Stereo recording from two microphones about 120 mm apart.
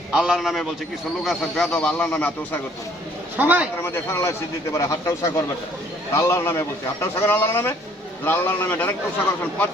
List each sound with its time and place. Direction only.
0.1 s a man's voice: 5° right (ahead or behind); by 2.6 s 15° left (ahead or behind)
3.3 s speech: 15° right (ahead or behind)
3.8 s a man's voice: 20° left (ahead or behind)